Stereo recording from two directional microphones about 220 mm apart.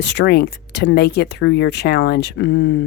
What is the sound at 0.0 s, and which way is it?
Speech, 50° left (ahead or behind).